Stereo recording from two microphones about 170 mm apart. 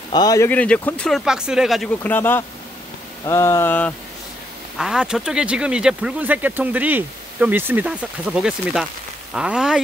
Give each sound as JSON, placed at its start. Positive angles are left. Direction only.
{"t": 0.1, "sound": "speech", "side_deg": 20}
{"t": 0.5, "sound": "speech", "side_deg": 10}
{"t": 3.3, "sound": "a sound", "side_deg": 15}
{"t": 4.7, "sound": "speech", "side_deg": -5}